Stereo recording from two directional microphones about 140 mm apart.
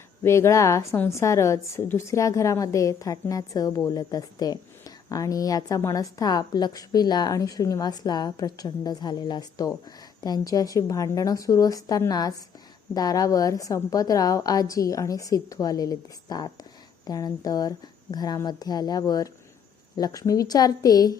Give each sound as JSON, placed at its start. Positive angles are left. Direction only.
{"t": 0.2, "sound": "a woman's voice", "side_deg": 20}